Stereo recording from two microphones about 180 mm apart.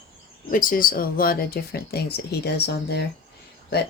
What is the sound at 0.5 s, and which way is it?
Speech, 50° left (ahead or behind).